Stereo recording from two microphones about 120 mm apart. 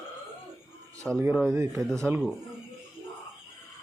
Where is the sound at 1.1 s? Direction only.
Centre (ahead or behind).